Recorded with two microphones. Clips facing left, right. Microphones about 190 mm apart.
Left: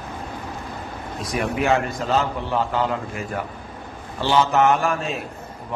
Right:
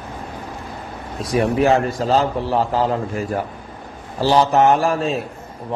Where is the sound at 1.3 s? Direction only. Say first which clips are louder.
Right 5 dB; 35° right (ahead or behind).